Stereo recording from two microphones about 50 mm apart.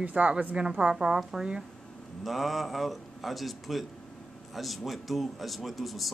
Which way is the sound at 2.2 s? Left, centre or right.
Centre.